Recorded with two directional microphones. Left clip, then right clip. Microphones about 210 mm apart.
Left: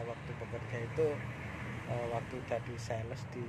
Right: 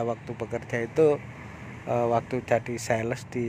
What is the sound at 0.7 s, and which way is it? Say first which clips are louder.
Speech: right 12 dB; 45° right (ahead or behind).